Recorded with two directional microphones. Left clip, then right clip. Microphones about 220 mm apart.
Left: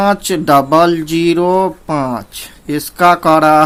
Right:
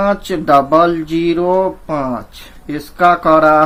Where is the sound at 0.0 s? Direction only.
40° left (ahead or behind).